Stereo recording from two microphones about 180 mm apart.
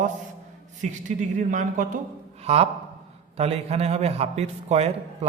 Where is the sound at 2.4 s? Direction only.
35° right (ahead or behind).